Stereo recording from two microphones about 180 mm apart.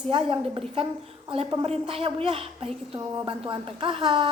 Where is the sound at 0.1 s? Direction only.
30° right (ahead or behind).